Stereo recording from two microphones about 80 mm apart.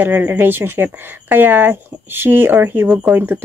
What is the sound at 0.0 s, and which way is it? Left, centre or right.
Speech, right.